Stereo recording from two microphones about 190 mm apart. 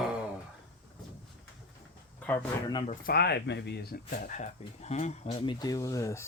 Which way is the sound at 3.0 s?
60° left (ahead or behind).